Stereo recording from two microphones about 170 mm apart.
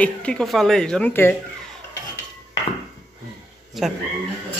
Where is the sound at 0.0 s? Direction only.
5° left (ahead or behind).